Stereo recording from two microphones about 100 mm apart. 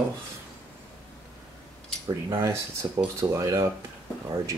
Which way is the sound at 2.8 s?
35° right (ahead or behind).